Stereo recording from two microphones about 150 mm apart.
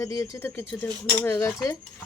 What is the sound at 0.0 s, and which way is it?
Speech, 20° left (ahead or behind).